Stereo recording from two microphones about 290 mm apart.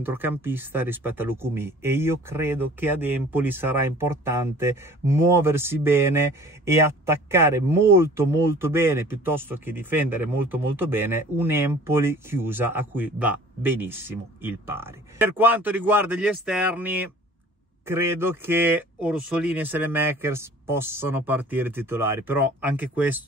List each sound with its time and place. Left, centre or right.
0.0 s speech: centre